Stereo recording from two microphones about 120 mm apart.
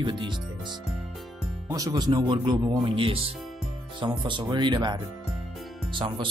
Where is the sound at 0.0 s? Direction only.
40° right (ahead or behind).